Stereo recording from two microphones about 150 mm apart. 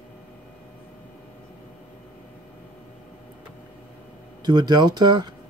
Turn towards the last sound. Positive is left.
turn(degrees=-30)  # may be behind; listen again after turning